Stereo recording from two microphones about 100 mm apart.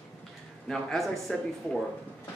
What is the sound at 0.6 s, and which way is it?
Speech, 5° left (ahead or behind).